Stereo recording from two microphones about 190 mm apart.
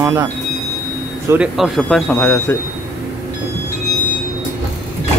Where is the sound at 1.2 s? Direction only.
5° right (ahead or behind); by 2.5 s 10° left (ahead or behind).